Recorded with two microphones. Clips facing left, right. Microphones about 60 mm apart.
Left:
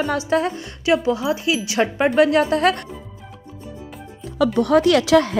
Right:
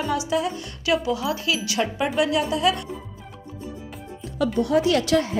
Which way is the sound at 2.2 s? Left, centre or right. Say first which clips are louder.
Left 6 dB; left.